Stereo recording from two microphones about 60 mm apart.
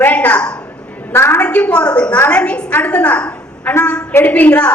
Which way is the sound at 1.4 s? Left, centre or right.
Left.